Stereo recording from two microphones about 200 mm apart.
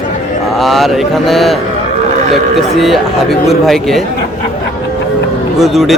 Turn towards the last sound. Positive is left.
turn(degrees=0)  # may be behind; listen again after turning